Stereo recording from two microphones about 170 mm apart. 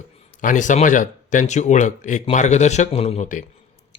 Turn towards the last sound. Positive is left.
turn(degrees=45)  # may be behind; listen again after turning